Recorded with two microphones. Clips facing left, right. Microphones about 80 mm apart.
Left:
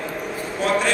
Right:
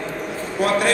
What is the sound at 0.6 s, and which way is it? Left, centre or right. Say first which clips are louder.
Speech: right 2 dB; right.